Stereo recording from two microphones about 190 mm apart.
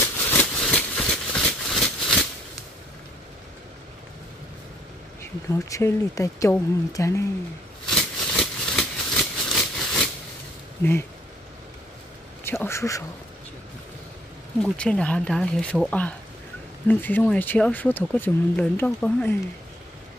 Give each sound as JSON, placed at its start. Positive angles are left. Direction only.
{"t": 0.0, "sound": "a sound", "side_deg": 10}
{"t": 5.2, "sound": "speech", "side_deg": 15}
{"t": 7.8, "sound": "a sound", "side_deg": 5}
{"t": 10.8, "sound": "speech", "side_deg": 10}
{"t": 12.4, "sound": "speech", "side_deg": 15}
{"t": 14.6, "sound": "speech", "side_deg": 5}